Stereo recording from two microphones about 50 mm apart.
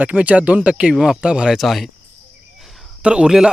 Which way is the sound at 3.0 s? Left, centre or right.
Right.